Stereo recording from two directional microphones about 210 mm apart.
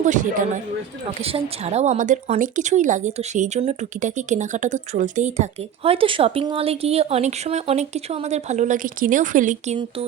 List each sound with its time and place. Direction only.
0.0 s a woman's voice: 35° right (ahead or behind)